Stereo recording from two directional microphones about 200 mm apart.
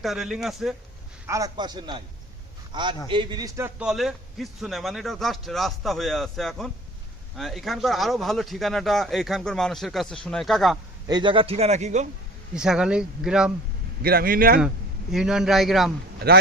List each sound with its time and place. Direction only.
0.0 s a man's voice: centre (ahead or behind)
1.3 s a man's voice: 20° right (ahead or behind)
3.8 s a man's voice: 5° right (ahead or behind)
11.1 s a man's voice: 25° right (ahead or behind)
12.5 s a man's voice: 5° right (ahead or behind)
14.0 s speech: 50° right (ahead or behind)
15.1 s a man's voice: 5° right (ahead or behind)
16.1 s a man's voice: 50° right (ahead or behind)